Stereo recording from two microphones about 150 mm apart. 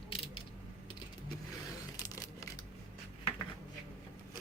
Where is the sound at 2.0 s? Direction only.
25° left (ahead or behind).